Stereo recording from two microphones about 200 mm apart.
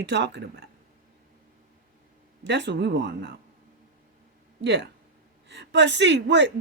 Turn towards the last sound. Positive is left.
turn(degrees=-60)  # may be behind; listen again after turning